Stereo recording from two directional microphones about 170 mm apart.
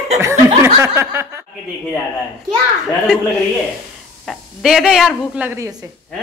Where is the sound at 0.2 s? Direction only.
15° right (ahead or behind).